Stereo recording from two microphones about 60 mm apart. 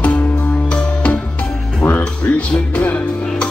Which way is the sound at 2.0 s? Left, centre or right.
Left.